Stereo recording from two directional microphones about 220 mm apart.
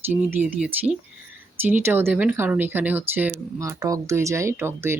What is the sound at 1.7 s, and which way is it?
Speech, 10° right (ahead or behind).